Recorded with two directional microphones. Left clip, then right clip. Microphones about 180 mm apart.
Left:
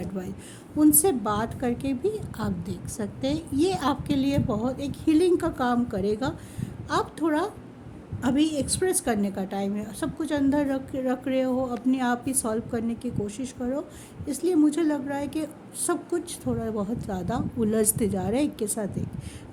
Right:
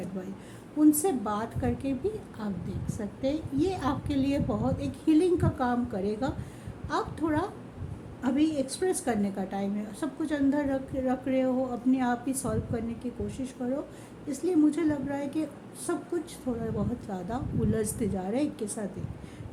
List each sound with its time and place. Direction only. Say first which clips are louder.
0.8 s a woman's voice: left 3 dB; 50° left (ahead or behind)